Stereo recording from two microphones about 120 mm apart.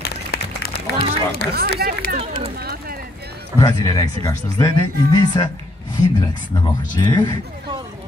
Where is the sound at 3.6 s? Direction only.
30° left (ahead or behind).